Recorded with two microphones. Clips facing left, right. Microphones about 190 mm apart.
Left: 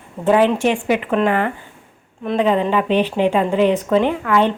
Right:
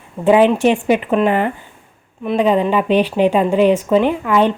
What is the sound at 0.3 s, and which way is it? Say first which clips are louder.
A woman's voice: right 3 dB; 15° right (ahead or behind).